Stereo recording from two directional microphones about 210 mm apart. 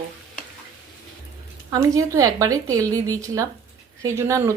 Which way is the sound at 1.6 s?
15° right (ahead or behind).